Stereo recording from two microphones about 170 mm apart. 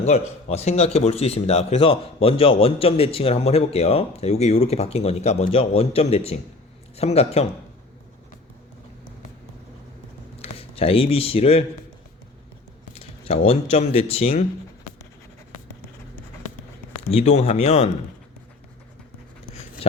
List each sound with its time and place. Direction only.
0.0 s speech: 40° left (ahead or behind)
10.3 s speech: 35° left (ahead or behind)
12.9 s speech: 35° left (ahead or behind)
17.1 s speech: 40° left (ahead or behind)